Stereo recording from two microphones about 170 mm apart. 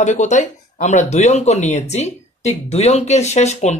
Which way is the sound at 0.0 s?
45° left (ahead or behind).